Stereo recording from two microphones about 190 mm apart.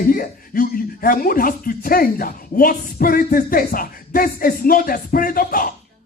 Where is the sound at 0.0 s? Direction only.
50° left (ahead or behind).